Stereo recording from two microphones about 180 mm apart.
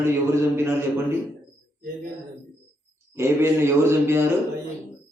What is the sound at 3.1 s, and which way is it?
A man's voice, 15° right (ahead or behind).